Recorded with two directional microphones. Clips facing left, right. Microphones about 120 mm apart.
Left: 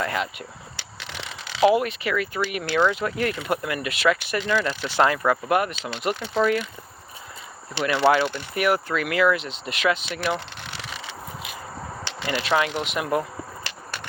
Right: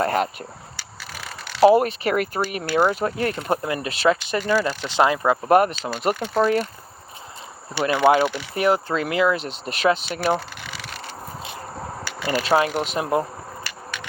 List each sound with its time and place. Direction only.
0.0 s speech: 40° right (ahead or behind)
1.0 s a sound: 75° left (ahead or behind)
1.6 s speech: 40° right (ahead or behind)
2.3 s speech: 35° right (ahead or behind)
4.9 s speech: 20° right (ahead or behind)
5.5 s speech: 40° right (ahead or behind)
6.4 s speech: 35° right (ahead or behind)
7.9 s speech: 15° right (ahead or behind)
8.5 s speech: 30° right (ahead or behind)
9.4 s speech: 40° right (ahead or behind)
10.8 s a sound: 60° right (ahead or behind)
12.2 s speech: 40° right (ahead or behind)